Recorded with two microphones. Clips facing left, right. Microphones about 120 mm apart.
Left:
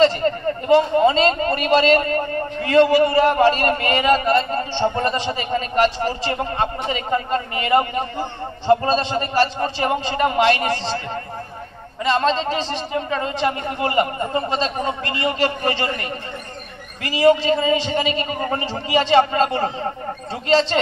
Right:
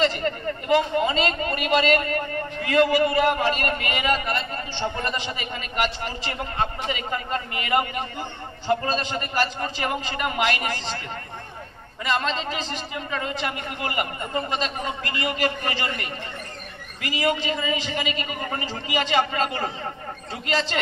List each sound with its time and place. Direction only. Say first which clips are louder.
0.0 s a man's voice: left 7 dB; 35° left (ahead or behind)
12.0 s a man's voice: left 7 dB; 30° left (ahead or behind)